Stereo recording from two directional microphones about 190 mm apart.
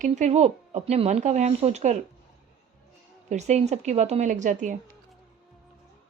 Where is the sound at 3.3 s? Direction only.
35° right (ahead or behind).